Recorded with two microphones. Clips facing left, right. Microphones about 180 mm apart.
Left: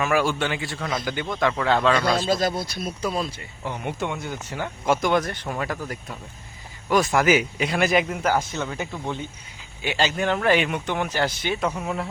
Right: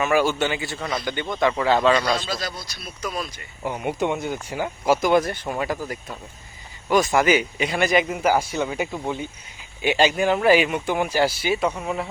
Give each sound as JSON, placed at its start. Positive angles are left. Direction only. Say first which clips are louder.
{"t": 0.0, "sound": "a man's voice", "louder": "right 2 dB", "side_deg": 0}
{"t": 2.2, "sound": "speech", "louder": "left 7 dB", "side_deg": 50}
{"t": 3.0, "sound": "speech", "louder": "left 2 dB", "side_deg": 30}
{"t": 3.6, "sound": "speech", "louder": "right 4 dB", "side_deg": -15}
{"t": 6.9, "sound": "a man's voice", "louder": "right 1 dB", "side_deg": 0}
{"t": 8.2, "sound": "a man's voice", "louder": "right 3 dB", "side_deg": -10}